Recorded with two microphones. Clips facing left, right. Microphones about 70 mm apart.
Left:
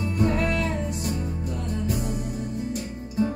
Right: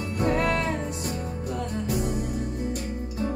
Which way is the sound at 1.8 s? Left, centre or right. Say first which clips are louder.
Right 1 dB; right.